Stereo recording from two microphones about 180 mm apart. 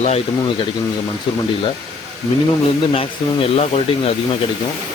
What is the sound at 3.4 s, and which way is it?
Speech, 30° left (ahead or behind).